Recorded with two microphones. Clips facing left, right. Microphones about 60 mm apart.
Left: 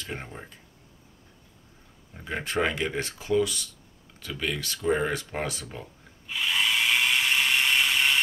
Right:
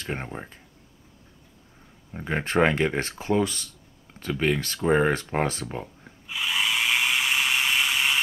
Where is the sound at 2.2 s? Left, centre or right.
Right.